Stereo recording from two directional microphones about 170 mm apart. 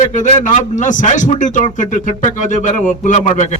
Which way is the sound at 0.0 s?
45° left (ahead or behind).